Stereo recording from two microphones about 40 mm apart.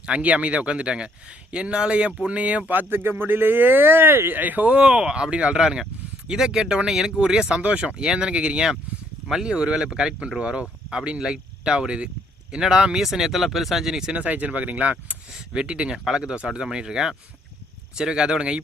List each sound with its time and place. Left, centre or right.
0.0 s speech: right
2.7 s speech: right
4.4 s speech: right
4.7 s speech: right
5.5 s speech: centre
7.6 s speech: right
7.9 s speech: centre
14.3 s speech: right
15.5 s speech: right